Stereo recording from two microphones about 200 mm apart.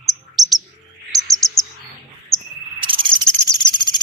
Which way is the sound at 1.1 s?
Centre (ahead or behind).